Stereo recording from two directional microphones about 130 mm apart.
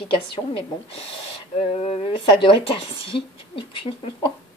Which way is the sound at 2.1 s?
40° left (ahead or behind).